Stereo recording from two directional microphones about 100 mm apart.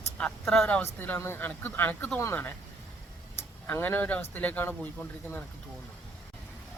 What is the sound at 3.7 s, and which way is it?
Speech, 20° left (ahead or behind).